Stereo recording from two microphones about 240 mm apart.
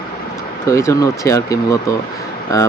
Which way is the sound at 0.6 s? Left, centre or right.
Centre.